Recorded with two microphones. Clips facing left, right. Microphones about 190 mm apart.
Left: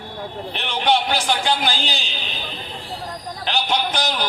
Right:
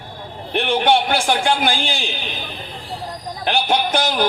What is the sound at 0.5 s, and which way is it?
A man's voice, 50° right (ahead or behind).